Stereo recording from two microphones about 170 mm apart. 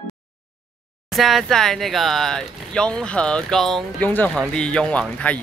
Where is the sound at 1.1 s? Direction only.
Centre (ahead or behind).